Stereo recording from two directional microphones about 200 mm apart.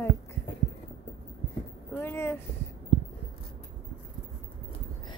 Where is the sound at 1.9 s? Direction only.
10° left (ahead or behind).